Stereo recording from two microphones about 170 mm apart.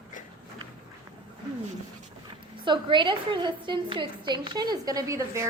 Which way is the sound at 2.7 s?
30° right (ahead or behind).